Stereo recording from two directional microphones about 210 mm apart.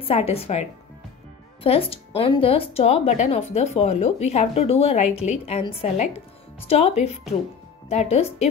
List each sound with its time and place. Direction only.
0.0 s speech: 30° left (ahead or behind)